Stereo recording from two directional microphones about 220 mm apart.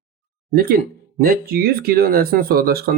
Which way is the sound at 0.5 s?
40° right (ahead or behind).